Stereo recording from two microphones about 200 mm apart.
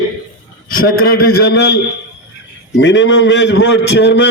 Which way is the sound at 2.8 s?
65° left (ahead or behind).